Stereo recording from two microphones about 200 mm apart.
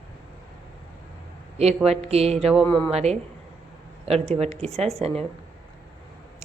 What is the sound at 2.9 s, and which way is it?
Speech, 30° right (ahead or behind).